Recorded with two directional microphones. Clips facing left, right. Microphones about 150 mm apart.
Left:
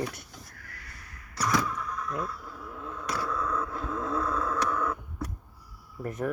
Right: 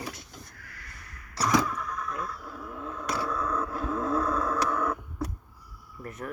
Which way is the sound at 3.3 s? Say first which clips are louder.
Right 1 dB; 10° right (ahead or behind).